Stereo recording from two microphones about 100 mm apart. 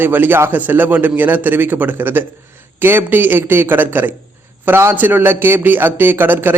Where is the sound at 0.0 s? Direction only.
20° right (ahead or behind).